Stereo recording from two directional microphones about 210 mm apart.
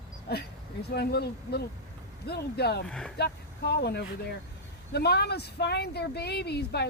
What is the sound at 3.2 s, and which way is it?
Speech, 50° left (ahead or behind).